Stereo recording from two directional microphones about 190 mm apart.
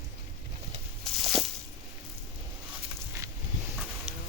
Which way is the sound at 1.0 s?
Centre (ahead or behind).